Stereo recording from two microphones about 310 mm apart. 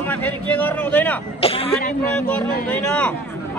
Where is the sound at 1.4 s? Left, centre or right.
Centre.